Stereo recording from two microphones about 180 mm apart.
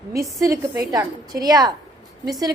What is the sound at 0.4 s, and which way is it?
A woman's voice, 15° right (ahead or behind).